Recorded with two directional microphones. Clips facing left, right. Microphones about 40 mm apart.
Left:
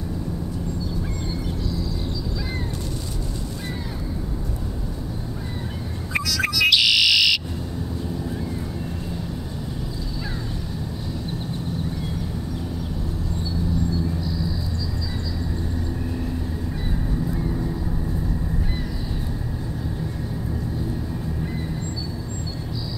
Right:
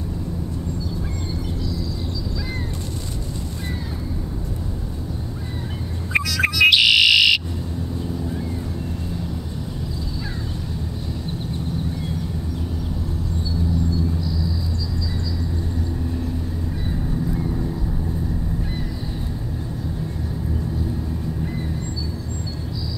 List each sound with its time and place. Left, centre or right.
6.1 s bird: right